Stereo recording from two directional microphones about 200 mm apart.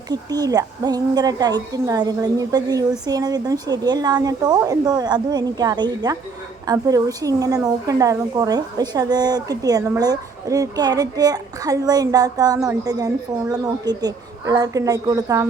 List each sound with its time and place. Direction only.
0.1 s a woman's voice: 20° right (ahead or behind)